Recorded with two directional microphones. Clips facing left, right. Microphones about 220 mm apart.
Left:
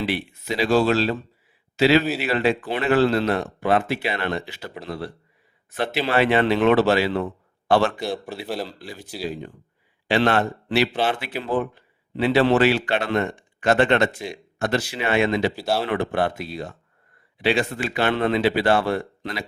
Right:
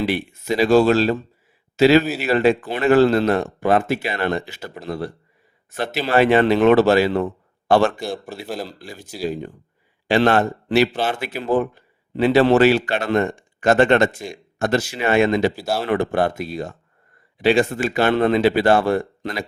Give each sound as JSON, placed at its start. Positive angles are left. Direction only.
{"t": 0.0, "sound": "a man's voice", "side_deg": -45}
{"t": 8.4, "sound": "speech", "side_deg": 0}
{"t": 10.1, "sound": "a man's voice", "side_deg": -45}